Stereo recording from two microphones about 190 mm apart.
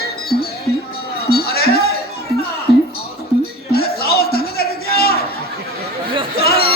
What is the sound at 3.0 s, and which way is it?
Music, 55° left (ahead or behind).